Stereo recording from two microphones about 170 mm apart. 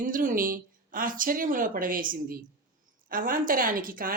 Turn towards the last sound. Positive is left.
turn(degrees=-55)  # may be behind; listen again after turning